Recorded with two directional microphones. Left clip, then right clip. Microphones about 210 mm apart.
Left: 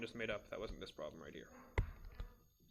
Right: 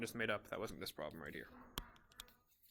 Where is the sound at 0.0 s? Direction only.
35° right (ahead or behind).